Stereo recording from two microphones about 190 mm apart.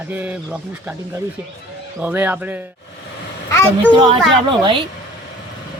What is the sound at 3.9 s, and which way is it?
Speech, 25° right (ahead or behind).